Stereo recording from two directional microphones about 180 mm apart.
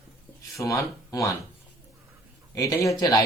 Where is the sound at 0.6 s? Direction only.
15° left (ahead or behind).